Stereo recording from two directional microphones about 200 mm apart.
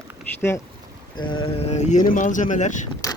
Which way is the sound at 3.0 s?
15° left (ahead or behind).